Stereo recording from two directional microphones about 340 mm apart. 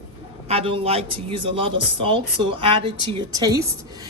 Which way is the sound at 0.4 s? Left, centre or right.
Centre.